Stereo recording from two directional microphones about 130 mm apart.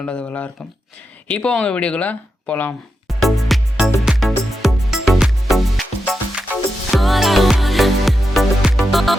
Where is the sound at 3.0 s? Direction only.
Centre (ahead or behind).